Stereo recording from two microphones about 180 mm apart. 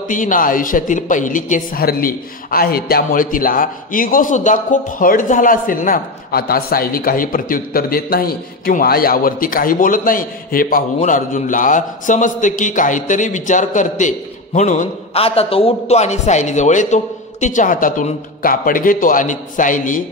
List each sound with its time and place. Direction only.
0.1 s a man's voice: 45° left (ahead or behind)